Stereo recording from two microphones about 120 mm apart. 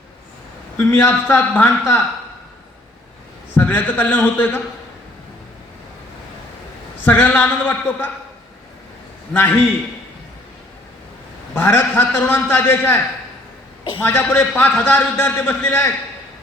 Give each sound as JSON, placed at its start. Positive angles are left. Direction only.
{"t": 0.8, "sound": "a man's voice", "side_deg": 20}
{"t": 3.5, "sound": "a man's voice", "side_deg": 15}
{"t": 7.0, "sound": "a man's voice", "side_deg": 15}
{"t": 9.3, "sound": "a man's voice", "side_deg": 15}
{"t": 11.5, "sound": "a man's voice", "side_deg": 20}
{"t": 14.0, "sound": "a man's voice", "side_deg": 20}